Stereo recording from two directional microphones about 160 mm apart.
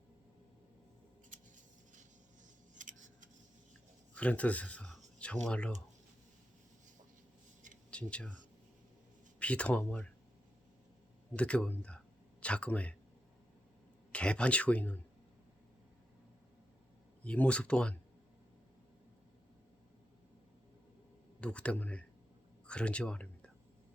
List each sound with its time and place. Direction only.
2.7 s scissors: 55° right (ahead or behind)
4.1 s speech: 10° left (ahead or behind)
7.9 s speech: 5° left (ahead or behind)
9.4 s speech: 10° left (ahead or behind)
11.3 s speech: 10° left (ahead or behind)
14.1 s speech: 5° left (ahead or behind)
17.2 s speech: 10° left (ahead or behind)
21.4 s speech: 5° left (ahead or behind)